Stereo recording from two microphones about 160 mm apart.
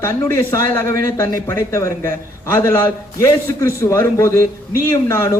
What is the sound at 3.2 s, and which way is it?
A man's voice, 15° left (ahead or behind).